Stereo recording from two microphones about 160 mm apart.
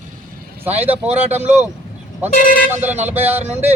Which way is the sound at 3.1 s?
10° right (ahead or behind).